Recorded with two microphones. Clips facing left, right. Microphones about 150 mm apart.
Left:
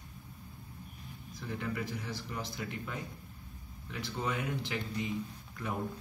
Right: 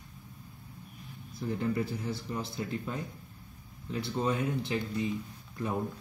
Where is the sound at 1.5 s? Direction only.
30° right (ahead or behind).